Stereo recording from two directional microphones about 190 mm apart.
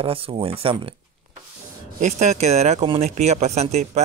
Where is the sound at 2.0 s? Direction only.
35° right (ahead or behind).